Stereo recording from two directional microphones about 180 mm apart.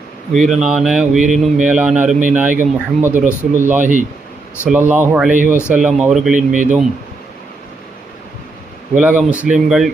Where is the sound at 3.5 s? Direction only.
10° right (ahead or behind).